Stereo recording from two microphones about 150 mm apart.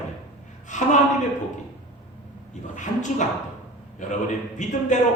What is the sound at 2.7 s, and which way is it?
Speech, 55° left (ahead or behind).